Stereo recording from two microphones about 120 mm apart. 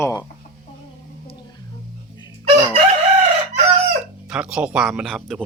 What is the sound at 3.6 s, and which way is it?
Chicken, 75° right (ahead or behind).